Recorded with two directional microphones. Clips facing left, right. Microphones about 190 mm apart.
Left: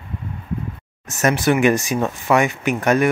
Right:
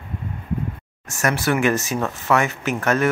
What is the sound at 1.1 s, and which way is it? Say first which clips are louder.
Speech: left 4 dB; 20° left (ahead or behind).